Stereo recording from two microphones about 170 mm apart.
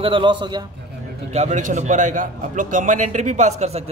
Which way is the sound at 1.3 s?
45° right (ahead or behind).